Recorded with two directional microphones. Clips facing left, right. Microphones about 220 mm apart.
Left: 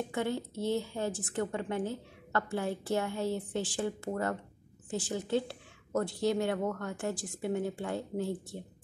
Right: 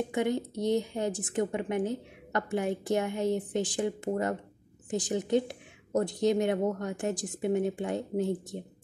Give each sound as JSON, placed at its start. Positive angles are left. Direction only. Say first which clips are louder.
{"t": 0.1, "sound": "a woman's voice", "louder": "right 4 dB", "side_deg": -15}